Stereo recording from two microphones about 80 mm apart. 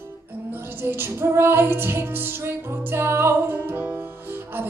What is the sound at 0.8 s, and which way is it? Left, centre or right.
Music, right.